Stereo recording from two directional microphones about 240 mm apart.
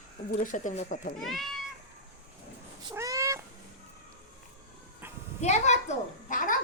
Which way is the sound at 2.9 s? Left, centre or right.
Centre.